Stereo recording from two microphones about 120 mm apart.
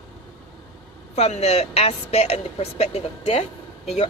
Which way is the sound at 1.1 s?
65° left (ahead or behind).